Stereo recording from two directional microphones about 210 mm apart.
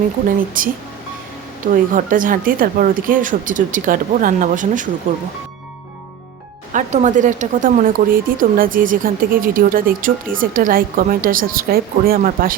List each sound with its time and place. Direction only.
0.3 s speech: 40° right (ahead or behind)
6.7 s speech: 35° right (ahead or behind)